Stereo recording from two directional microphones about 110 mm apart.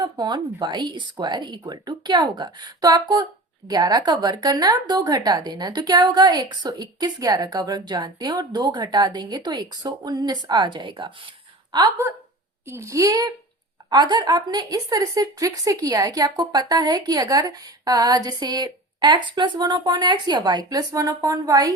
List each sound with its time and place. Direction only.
0.0 s a woman's voice: 40° right (ahead or behind)
12.6 s a woman's voice: 25° right (ahead or behind)